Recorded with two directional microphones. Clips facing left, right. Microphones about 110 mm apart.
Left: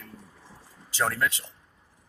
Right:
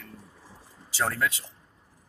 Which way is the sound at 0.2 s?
5° right (ahead or behind).